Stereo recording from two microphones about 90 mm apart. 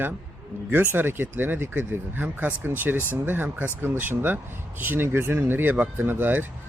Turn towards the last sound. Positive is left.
turn(degrees=-20)  # may be behind; listen again after turning